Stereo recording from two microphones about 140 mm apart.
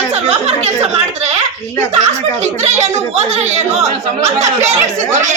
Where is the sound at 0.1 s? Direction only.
50° right (ahead or behind).